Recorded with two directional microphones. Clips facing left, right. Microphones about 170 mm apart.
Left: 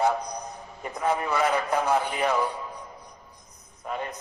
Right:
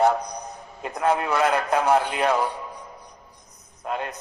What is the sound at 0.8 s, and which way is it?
A man's voice, 70° right (ahead or behind).